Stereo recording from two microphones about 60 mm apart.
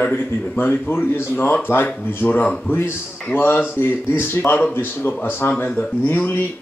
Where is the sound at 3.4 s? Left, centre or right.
Left.